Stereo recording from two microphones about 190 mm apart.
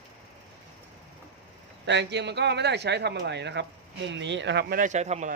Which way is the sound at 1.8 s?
65° right (ahead or behind).